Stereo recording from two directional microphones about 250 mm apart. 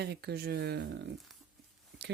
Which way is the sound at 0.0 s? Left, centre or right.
Right.